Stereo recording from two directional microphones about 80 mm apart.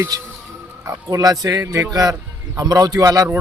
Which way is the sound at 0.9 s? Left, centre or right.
Right.